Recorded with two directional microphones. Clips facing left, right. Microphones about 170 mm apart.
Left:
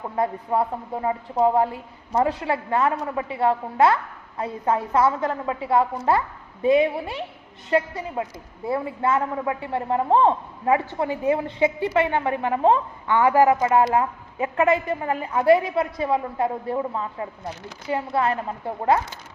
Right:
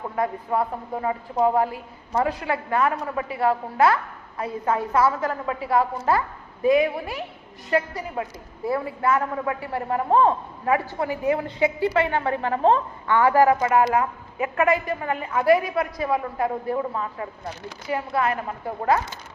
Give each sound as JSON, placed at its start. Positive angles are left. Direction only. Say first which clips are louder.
{"t": 0.2, "sound": "a woman's voice", "louder": "left 1 dB", "side_deg": 30}